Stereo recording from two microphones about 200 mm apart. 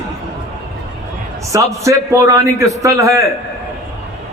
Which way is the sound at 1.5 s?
15° right (ahead or behind).